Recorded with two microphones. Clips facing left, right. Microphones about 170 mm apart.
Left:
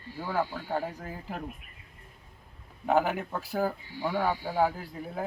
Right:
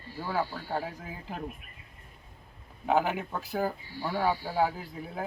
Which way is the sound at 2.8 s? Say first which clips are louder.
Left 1 dB; centre (ahead or behind).